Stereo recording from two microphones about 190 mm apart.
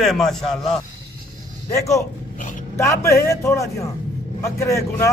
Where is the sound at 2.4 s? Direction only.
40° left (ahead or behind).